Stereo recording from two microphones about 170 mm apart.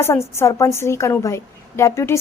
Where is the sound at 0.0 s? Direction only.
15° left (ahead or behind).